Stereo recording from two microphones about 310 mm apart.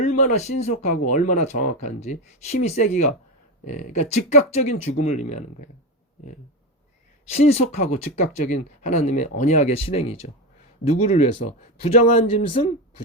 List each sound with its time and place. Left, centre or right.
0.0 s speech: left
7.3 s speech: left